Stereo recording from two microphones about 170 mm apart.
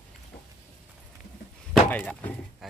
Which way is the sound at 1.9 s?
10° left (ahead or behind).